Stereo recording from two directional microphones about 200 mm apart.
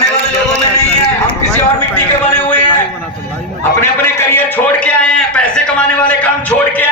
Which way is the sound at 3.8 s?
10° left (ahead or behind).